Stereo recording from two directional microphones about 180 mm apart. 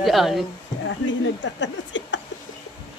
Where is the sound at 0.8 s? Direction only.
90° left.